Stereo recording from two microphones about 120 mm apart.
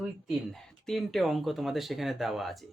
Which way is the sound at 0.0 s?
Centre (ahead or behind).